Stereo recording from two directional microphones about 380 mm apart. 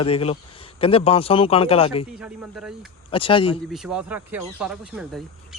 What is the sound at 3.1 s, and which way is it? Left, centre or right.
Speech, centre.